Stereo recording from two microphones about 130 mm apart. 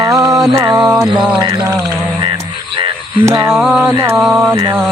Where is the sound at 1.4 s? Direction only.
25° right (ahead or behind).